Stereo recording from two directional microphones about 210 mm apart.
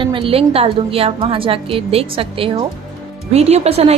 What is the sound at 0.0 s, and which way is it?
A woman's voice, 25° right (ahead or behind).